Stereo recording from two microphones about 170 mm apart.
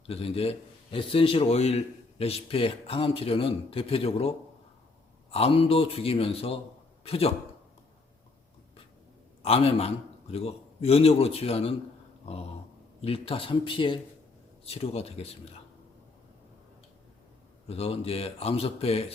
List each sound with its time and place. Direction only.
0.1 s a man's voice: 35° left (ahead or behind)
9.4 s a man's voice: 35° left (ahead or behind)
13.0 s a man's voice: 35° left (ahead or behind)
17.7 s a man's voice: 35° left (ahead or behind)